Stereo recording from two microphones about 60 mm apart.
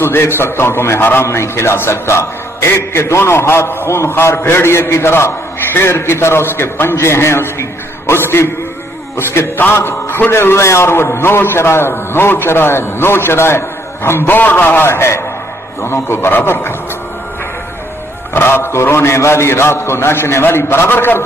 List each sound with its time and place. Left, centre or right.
0.0 s a man's voice: left
18.3 s a man's voice: left